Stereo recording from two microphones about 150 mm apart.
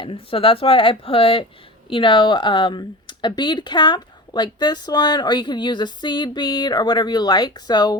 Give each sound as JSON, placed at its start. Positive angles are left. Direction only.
{"t": 0.0, "sound": "speech", "side_deg": 35}